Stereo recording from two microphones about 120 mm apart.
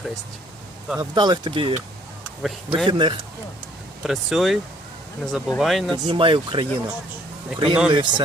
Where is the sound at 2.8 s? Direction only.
40° right (ahead or behind).